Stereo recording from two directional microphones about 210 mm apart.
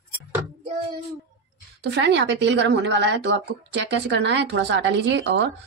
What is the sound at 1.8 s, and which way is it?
Speech, 55° right (ahead or behind).